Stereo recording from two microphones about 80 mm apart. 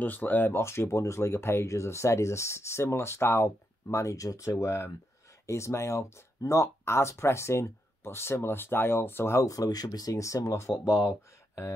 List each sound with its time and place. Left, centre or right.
0.0 s speech: left
4.5 s speech: left